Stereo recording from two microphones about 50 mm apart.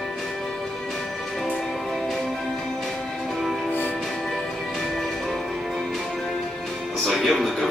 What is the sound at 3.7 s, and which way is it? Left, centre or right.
Music, left.